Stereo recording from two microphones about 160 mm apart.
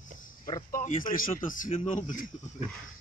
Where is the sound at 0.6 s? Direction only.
55° left (ahead or behind).